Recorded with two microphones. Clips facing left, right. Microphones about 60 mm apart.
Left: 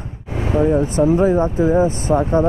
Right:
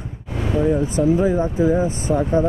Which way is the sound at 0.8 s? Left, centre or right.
Left.